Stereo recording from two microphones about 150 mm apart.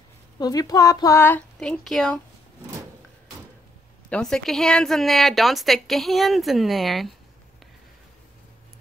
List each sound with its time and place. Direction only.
0.4 s a woman's voice: 25° left (ahead or behind); by 2.1 s 5° left (ahead or behind)
4.1 s speech: 5° left (ahead or behind)